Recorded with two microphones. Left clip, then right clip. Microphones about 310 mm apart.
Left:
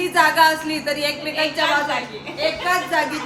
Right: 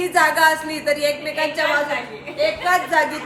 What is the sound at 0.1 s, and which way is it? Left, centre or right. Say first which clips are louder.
Speech: even; centre.